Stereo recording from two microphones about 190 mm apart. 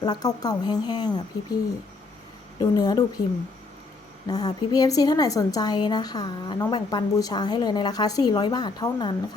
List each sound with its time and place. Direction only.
0.0 s a woman's voice: 20° left (ahead or behind)
2.6 s a woman's voice: 20° left (ahead or behind)
4.3 s a woman's voice: 20° left (ahead or behind)